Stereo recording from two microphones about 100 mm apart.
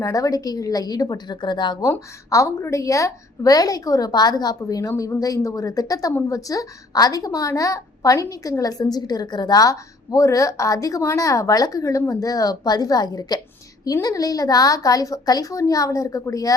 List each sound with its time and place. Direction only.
0.0 s a woman's voice: 35° left (ahead or behind)
1.8 s a woman's voice: 30° left (ahead or behind)